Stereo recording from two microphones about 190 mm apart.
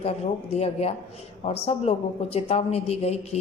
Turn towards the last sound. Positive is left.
turn(degrees=35)  # may be behind; listen again after turning